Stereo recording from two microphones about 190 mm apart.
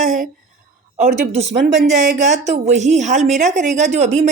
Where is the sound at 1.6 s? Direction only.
65° right (ahead or behind).